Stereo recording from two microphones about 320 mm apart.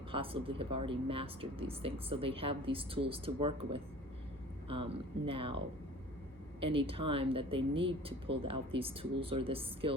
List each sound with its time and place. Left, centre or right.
0.1 s a woman's voice: centre
6.6 s a woman's voice: centre